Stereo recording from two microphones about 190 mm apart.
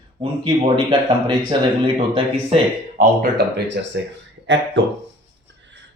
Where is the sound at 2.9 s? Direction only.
60° right (ahead or behind).